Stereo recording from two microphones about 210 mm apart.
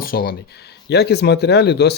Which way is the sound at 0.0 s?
45° left (ahead or behind).